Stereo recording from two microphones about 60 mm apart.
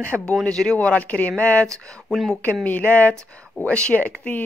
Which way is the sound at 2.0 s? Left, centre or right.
Centre.